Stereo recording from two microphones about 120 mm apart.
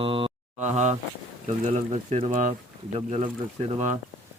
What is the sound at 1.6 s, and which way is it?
Speech, 90° right.